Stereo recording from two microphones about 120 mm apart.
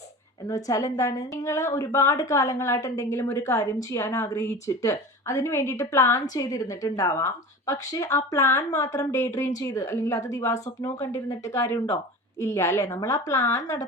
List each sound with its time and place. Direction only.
0.4 s speech: 25° left (ahead or behind)